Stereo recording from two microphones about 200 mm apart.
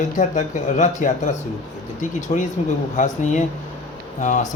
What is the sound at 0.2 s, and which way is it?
A man's voice, 40° left (ahead or behind).